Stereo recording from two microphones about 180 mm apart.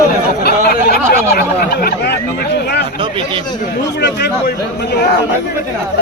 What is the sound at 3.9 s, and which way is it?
Speech, 70° left (ahead or behind).